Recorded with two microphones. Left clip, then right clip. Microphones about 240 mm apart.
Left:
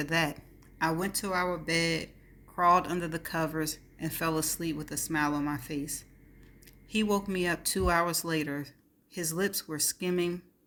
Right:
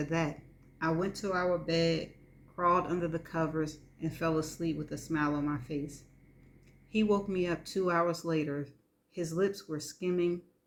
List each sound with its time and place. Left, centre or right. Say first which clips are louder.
0.0 s speech: left 4 dB; left
6.9 s speech: even; left